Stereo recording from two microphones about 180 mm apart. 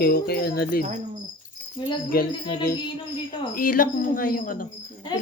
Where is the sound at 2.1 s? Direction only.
55° left (ahead or behind).